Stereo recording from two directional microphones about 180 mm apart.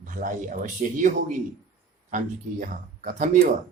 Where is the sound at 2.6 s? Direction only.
50° right (ahead or behind).